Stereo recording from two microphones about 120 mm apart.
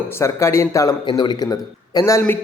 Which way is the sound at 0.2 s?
20° left (ahead or behind).